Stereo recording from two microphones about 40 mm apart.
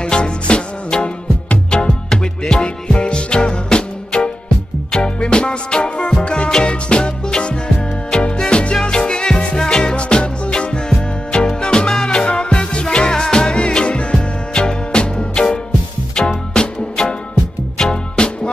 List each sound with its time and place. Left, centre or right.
0.0 s music: left
16.2 s music: centre